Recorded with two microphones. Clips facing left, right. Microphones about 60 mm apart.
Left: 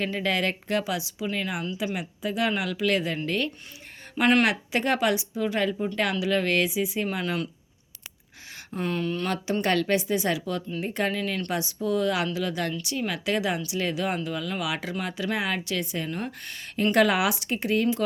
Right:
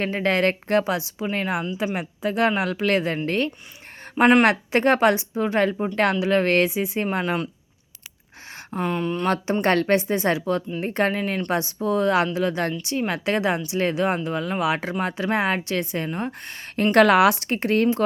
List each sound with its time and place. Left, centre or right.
0.0 s a woman's voice: right
4.4 s a woman's voice: right
8.5 s speech: right
9.2 s a woman's voice: right
11.2 s a woman's voice: right
16.7 s a woman's voice: right